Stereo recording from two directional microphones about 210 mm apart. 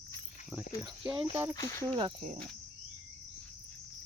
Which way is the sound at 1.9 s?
25° right (ahead or behind).